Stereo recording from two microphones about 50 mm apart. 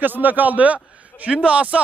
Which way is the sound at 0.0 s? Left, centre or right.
Right.